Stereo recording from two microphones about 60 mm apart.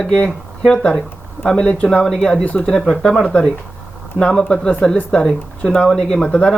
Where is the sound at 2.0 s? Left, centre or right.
Centre.